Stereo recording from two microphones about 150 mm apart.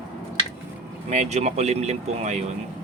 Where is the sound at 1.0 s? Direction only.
50° right (ahead or behind).